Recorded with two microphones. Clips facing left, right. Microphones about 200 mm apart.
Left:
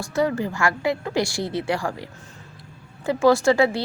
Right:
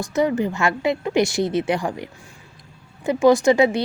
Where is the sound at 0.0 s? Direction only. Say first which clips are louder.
Right 3 dB; 20° right (ahead or behind).